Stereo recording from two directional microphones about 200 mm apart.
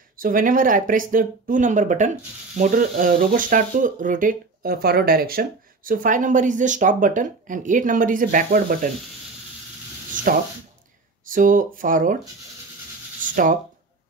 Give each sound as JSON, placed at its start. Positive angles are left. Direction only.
{"t": 0.2, "sound": "speech", "side_deg": -45}
{"t": 11.2, "sound": "speech", "side_deg": -45}
{"t": 13.2, "sound": "a sound", "side_deg": -40}